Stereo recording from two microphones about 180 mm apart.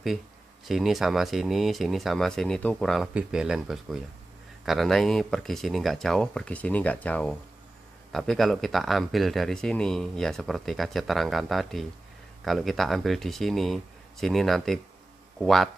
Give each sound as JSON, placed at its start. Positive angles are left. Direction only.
{"t": 0.7, "sound": "speech", "side_deg": 0}